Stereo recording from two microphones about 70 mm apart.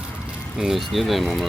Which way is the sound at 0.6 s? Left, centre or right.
Centre.